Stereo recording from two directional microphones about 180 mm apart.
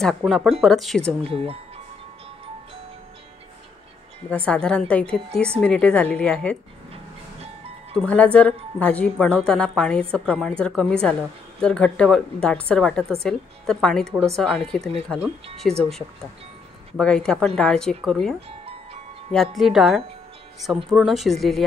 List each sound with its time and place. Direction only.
0.0 s a woman's voice: centre (ahead or behind)
1.3 s speech: 30° right (ahead or behind)
4.3 s a woman's voice: 5° left (ahead or behind)
7.9 s a woman's voice: 5° left (ahead or behind)
17.0 s a woman's voice: 5° left (ahead or behind)
19.3 s a woman's voice: centre (ahead or behind)